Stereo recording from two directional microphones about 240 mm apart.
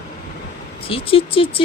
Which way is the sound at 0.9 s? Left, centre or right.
Left.